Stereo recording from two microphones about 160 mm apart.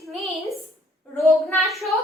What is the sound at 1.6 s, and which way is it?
Speech, centre (ahead or behind).